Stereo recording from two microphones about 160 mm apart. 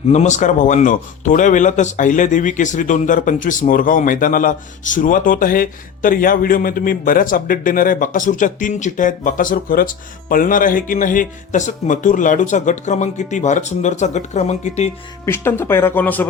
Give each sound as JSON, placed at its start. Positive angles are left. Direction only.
{"t": 0.1, "sound": "speech", "side_deg": 45}
{"t": 15.3, "sound": "speech", "side_deg": 15}